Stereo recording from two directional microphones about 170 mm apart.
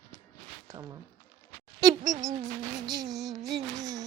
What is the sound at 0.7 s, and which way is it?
Speech, 20° right (ahead or behind).